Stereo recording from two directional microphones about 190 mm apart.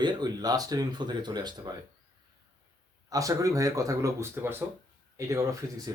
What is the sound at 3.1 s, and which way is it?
Speech, 20° right (ahead or behind).